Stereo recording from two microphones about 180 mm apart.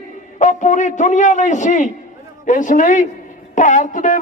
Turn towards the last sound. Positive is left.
turn(degrees=45)  # may be behind; listen again after turning